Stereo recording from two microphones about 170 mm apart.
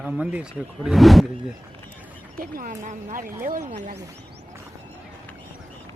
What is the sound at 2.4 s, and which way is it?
Speech, 55° right (ahead or behind).